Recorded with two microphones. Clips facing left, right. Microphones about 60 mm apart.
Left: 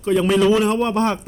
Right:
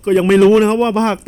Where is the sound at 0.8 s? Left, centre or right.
Right.